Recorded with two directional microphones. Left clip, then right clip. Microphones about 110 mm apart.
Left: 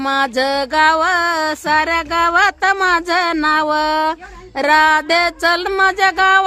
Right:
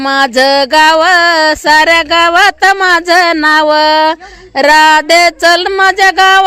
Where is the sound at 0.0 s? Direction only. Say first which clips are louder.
Right 8 dB; 40° right (ahead or behind).